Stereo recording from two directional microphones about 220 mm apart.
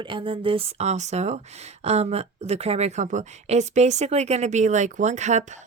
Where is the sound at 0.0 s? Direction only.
20° right (ahead or behind).